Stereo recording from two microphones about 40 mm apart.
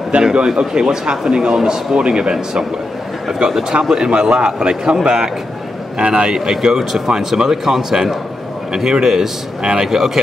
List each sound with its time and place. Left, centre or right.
0.1 s speech: right
3.3 s speech: centre